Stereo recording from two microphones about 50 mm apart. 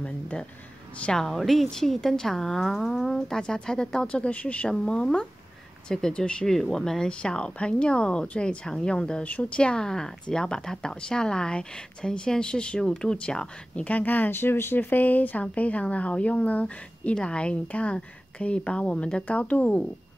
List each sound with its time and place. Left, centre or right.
0.0 s speech: left
1.1 s a woman's voice: centre
4.1 s speech: left
4.7 s speech: centre
9.2 s speech: left
13.8 s speech: left
14.3 s speech: left